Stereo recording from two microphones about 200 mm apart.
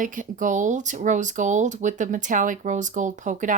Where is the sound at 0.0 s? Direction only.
40° right (ahead or behind).